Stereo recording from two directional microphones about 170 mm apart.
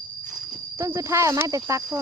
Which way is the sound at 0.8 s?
15° right (ahead or behind).